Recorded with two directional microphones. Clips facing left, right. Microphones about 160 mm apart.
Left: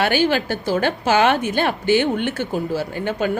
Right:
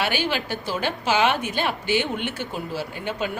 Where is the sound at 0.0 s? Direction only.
50° left (ahead or behind).